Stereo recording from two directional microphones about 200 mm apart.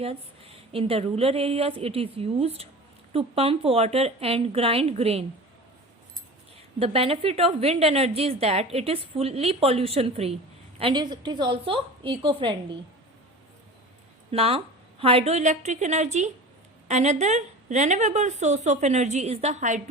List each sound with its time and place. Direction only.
0.0 s a woman's voice: 30° right (ahead or behind)
6.7 s a woman's voice: 30° right (ahead or behind)
14.3 s speech: 30° right (ahead or behind)